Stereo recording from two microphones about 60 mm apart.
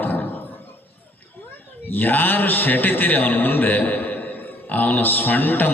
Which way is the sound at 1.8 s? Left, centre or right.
Left.